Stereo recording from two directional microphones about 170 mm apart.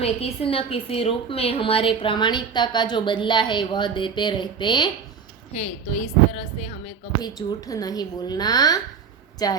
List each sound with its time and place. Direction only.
0.0 s a woman's voice: 35° left (ahead or behind)
7.2 s a woman's voice: 20° left (ahead or behind)